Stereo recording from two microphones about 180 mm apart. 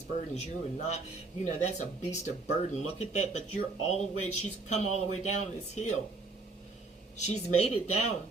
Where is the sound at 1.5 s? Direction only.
40° left (ahead or behind).